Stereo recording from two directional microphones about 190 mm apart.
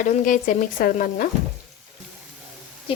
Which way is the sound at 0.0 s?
45° left (ahead or behind).